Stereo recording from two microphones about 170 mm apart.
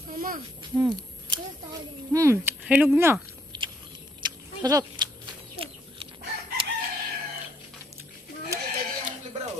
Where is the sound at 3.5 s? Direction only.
25° right (ahead or behind).